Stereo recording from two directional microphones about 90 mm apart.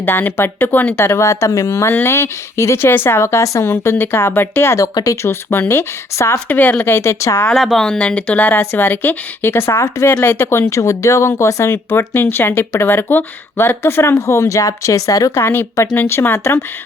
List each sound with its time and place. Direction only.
0.0 s speech: 25° left (ahead or behind)
6.5 s speech: 20° left (ahead or behind)
7.5 s speech: centre (ahead or behind); by 15.4 s 40° left (ahead or behind)
16.0 s speech: 25° left (ahead or behind)